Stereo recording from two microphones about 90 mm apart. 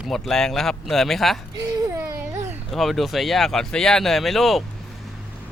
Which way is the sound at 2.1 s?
25° right (ahead or behind).